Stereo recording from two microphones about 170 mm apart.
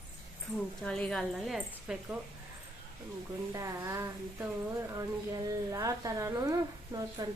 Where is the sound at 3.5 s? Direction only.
20° right (ahead or behind).